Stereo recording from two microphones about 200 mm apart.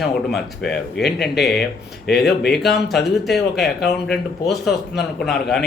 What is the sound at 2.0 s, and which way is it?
Speech, 55° left (ahead or behind).